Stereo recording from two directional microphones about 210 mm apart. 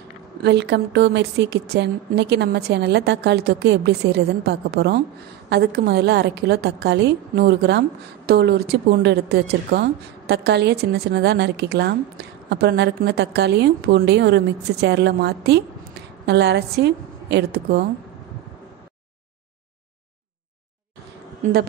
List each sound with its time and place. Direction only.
0.4 s a woman's voice: 55° right (ahead or behind)